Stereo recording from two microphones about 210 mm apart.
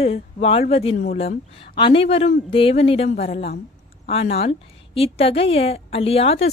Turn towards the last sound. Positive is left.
turn(degrees=30)  # may be behind; listen again after turning